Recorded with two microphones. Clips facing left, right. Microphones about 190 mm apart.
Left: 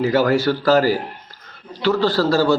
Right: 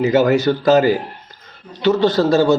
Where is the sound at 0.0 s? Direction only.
20° right (ahead or behind).